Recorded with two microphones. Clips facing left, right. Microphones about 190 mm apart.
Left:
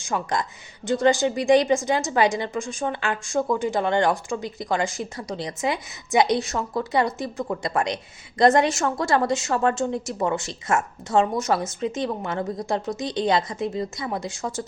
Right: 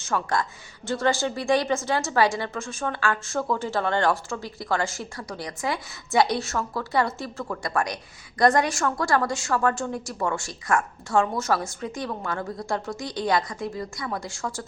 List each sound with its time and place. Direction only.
0.0 s a woman's voice: 15° left (ahead or behind)